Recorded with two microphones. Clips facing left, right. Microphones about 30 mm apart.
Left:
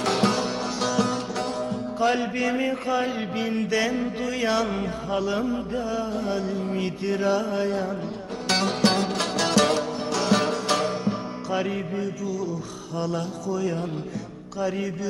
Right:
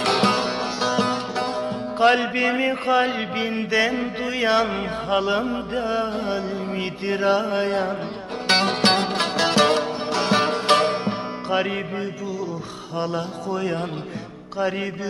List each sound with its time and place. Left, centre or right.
0.0 s music: right
0.8 s music: right
2.0 s music: right
2.4 s mantra: right
3.3 s music: right
5.1 s mantra: right
8.4 s music: right
10.8 s music: right
13.5 s music: right